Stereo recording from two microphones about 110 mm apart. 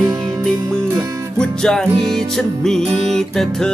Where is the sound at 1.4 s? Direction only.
5° left (ahead or behind).